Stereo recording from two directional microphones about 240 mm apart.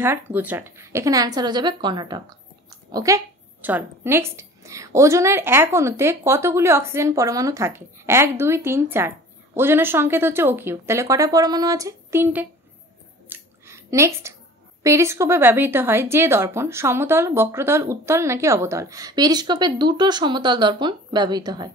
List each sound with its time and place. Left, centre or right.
0.0 s a woman's voice: centre
13.3 s a sound: centre
14.8 s a woman's voice: centre